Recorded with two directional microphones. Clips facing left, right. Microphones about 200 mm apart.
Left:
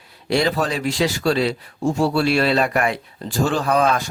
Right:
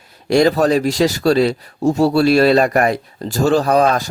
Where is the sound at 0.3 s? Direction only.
45° right (ahead or behind).